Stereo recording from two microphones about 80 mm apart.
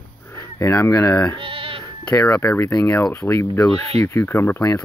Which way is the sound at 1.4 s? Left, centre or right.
Right.